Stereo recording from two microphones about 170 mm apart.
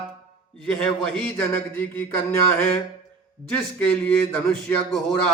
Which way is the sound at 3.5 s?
10° left (ahead or behind).